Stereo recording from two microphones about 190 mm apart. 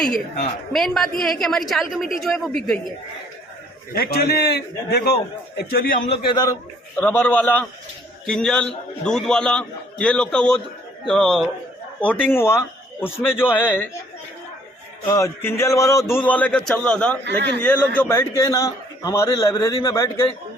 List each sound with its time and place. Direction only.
0.7 s a man's voice: centre (ahead or behind)
3.9 s a man's voice: 55° left (ahead or behind)
6.1 s a man's voice: 25° left (ahead or behind)
15.0 s a man's voice: 20° left (ahead or behind)